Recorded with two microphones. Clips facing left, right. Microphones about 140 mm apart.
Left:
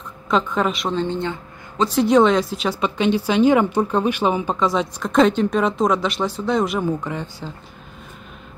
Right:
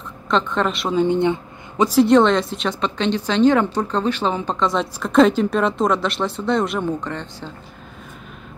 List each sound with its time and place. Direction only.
0.3 s speech: 5° left (ahead or behind)
1.0 s speech: 20° right (ahead or behind)
2.0 s speech: centre (ahead or behind)